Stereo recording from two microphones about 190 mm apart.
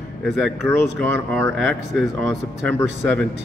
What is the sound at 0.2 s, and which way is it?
A man's voice, centre (ahead or behind).